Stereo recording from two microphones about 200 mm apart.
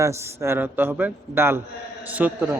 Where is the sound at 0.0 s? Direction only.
15° right (ahead or behind).